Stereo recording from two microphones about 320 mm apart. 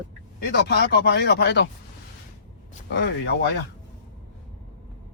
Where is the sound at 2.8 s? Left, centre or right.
Left.